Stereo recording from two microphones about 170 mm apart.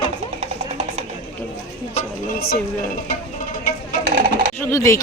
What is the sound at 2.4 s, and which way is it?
Speech, 65° left (ahead or behind).